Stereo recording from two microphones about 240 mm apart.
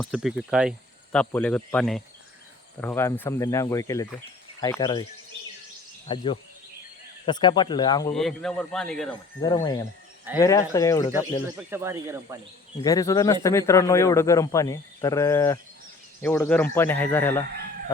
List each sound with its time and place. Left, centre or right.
0.0 s speech: centre
6.1 s speech: left
8.1 s speech: centre
10.3 s speech: centre
11.5 s speech: centre
12.8 s speech: centre